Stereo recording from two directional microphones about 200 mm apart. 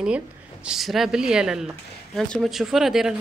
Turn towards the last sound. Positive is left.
turn(degrees=0)  # may be behind; listen again after turning